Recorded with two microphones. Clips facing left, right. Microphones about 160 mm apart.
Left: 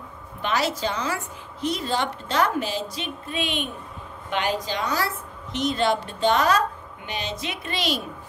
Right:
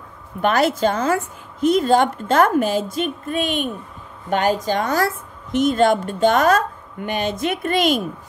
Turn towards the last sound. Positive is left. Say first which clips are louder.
# right 9 dB
turn(degrees=-50)  # may be behind; listen again after turning